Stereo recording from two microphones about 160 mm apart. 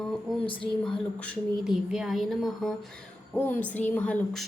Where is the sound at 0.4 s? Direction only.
30° left (ahead or behind).